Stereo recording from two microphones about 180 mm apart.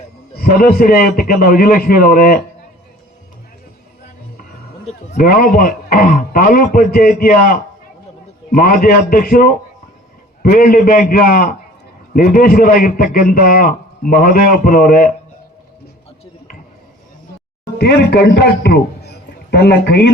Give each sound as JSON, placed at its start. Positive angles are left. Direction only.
{"t": 0.3, "sound": "a man's voice", "side_deg": 55}
{"t": 4.9, "sound": "a sound", "side_deg": 35}
{"t": 5.2, "sound": "a man's voice", "side_deg": 55}
{"t": 17.7, "sound": "a man's voice", "side_deg": 65}